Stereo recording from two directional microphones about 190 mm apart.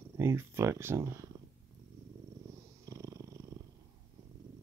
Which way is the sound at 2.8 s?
15° right (ahead or behind).